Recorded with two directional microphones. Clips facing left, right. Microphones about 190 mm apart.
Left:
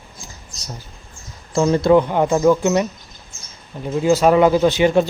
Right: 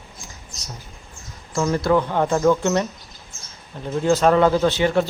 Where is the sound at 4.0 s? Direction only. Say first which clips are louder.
Left 3 dB; 10° left (ahead or behind).